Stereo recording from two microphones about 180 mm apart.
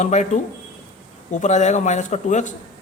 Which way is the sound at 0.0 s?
40° left (ahead or behind).